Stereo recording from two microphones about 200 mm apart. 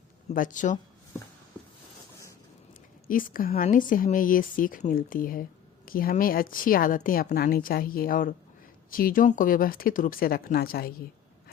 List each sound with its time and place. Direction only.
0.3 s speech: 40° left (ahead or behind)
3.1 s a woman's voice: 45° left (ahead or behind)